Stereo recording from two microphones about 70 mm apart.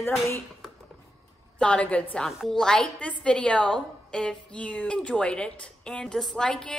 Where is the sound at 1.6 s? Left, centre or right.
Centre.